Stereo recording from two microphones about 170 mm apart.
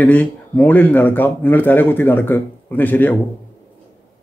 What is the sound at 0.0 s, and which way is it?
Speech, 10° left (ahead or behind).